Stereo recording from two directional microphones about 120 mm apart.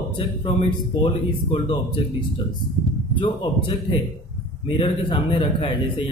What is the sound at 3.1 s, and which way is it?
A man's voice, 40° left (ahead or behind).